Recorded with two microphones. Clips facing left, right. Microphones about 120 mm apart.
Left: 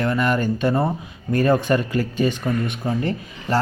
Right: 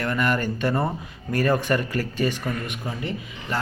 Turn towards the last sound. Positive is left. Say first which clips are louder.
# left 6 dB
turn(degrees=35)  # may be behind; listen again after turning